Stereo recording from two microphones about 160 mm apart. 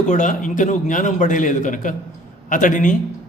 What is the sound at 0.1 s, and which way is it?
A man's voice, 55° left (ahead or behind).